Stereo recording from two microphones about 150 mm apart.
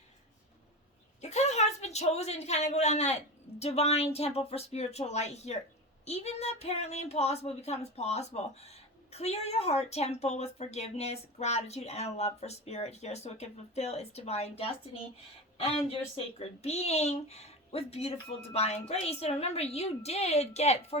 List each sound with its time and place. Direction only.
1.2 s a woman's voice: 50° left (ahead or behind)
15.9 s speech: 40° left (ahead or behind)